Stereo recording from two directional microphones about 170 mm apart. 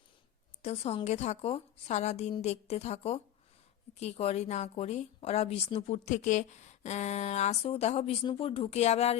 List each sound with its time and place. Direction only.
0.6 s a woman's voice: 40° left (ahead or behind)